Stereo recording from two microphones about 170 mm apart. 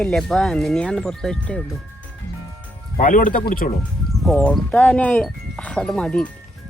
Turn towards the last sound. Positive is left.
turn(degrees=5)  # may be behind; listen again after turning